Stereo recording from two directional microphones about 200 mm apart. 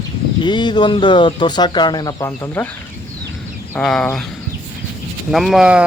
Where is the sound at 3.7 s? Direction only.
5° left (ahead or behind).